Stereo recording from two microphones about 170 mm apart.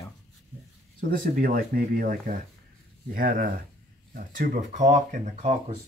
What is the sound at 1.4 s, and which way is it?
Speech, 60° right (ahead or behind).